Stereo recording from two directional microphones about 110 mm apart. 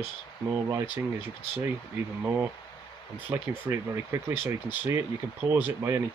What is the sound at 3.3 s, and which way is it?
Speech, 25° right (ahead or behind).